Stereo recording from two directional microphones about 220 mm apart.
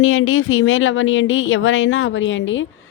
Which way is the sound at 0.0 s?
65° left (ahead or behind).